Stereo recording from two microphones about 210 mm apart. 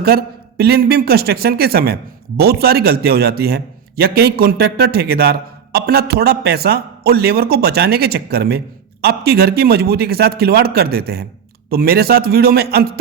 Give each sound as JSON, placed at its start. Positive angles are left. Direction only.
{"t": 0.0, "sound": "a man's voice", "side_deg": -45}